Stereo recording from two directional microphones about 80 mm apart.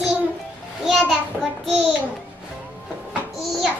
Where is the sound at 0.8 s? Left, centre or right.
Centre.